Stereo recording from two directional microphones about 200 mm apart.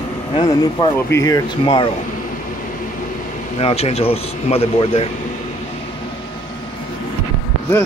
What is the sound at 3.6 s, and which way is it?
Speech, 30° left (ahead or behind).